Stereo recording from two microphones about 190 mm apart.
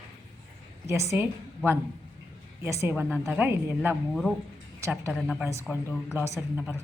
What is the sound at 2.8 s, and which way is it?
A woman's voice, 10° right (ahead or behind).